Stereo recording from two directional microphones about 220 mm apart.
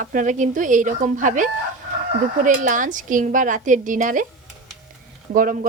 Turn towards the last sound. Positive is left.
turn(degrees=-40)  # may be behind; listen again after turning